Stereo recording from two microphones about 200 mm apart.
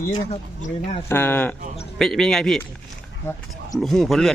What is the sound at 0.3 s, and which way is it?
Speech, 35° left (ahead or behind).